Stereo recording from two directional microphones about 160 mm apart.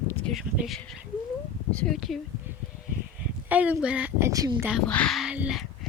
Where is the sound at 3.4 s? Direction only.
10° right (ahead or behind).